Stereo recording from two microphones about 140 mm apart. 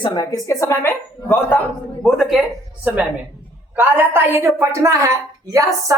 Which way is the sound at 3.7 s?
15° right (ahead or behind).